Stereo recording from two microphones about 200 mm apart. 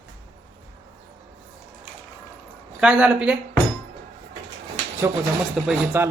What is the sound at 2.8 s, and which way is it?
Speech, 5° right (ahead or behind).